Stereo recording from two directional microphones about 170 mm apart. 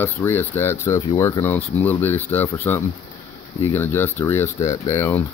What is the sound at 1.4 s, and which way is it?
Speech, 10° left (ahead or behind).